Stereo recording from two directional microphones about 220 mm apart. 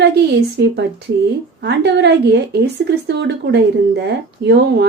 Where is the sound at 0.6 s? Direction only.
55° right (ahead or behind).